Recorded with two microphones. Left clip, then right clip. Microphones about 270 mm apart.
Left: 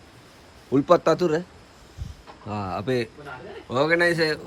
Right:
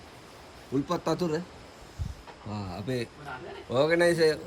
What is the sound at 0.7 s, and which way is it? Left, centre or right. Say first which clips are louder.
Speech: left 11 dB; centre.